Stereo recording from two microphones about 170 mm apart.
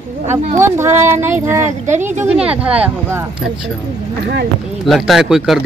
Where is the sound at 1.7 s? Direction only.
45° right (ahead or behind).